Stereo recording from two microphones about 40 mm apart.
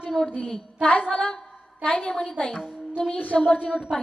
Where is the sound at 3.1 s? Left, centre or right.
Left.